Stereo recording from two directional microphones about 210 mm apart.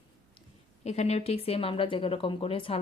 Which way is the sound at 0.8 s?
30° left (ahead or behind).